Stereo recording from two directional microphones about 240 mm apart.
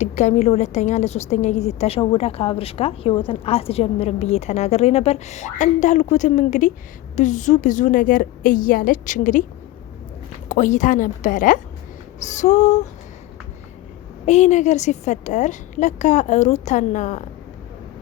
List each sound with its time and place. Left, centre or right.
0.0 s a woman's voice: left
10.5 s a woman's voice: left
14.3 s a woman's voice: left